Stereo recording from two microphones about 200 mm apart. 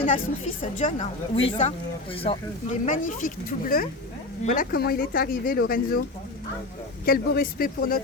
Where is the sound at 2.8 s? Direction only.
40° left (ahead or behind).